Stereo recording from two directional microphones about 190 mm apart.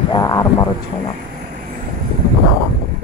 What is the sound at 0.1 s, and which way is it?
Speech, 20° left (ahead or behind).